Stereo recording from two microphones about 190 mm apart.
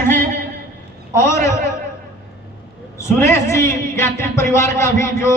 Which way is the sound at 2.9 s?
15° left (ahead or behind).